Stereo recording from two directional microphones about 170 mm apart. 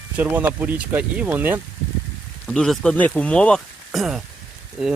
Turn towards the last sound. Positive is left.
turn(degrees=-5)  # may be behind; listen again after turning